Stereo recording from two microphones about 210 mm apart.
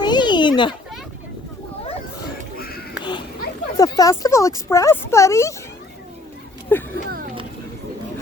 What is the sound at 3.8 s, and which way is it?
Speech, 15° left (ahead or behind).